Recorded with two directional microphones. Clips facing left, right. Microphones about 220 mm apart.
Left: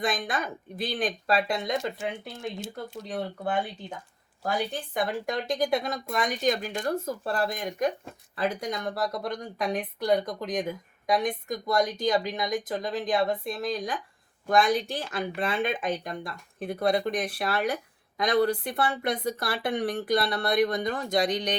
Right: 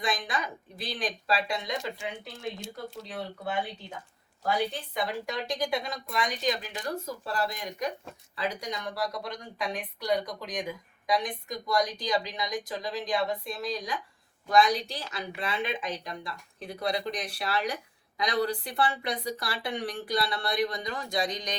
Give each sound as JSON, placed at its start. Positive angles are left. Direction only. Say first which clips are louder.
{"t": 0.0, "sound": "a woman's voice", "louder": "left 3 dB", "side_deg": 50}